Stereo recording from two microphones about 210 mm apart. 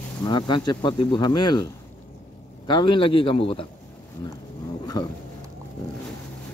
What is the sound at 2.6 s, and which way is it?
Speech, 20° left (ahead or behind).